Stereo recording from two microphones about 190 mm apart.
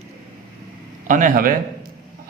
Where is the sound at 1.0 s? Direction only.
45° right (ahead or behind).